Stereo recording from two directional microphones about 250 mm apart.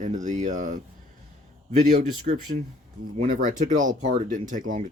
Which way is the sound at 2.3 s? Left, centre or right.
Right.